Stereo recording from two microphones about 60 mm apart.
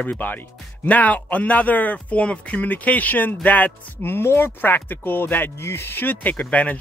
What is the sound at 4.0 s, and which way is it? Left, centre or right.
Speech, left.